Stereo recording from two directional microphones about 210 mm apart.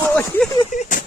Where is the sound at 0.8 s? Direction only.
40° left (ahead or behind).